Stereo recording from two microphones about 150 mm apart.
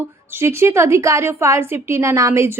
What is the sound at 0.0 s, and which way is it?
Speech, 15° right (ahead or behind).